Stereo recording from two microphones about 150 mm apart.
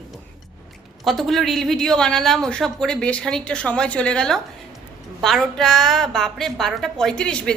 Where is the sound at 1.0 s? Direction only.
Centre (ahead or behind).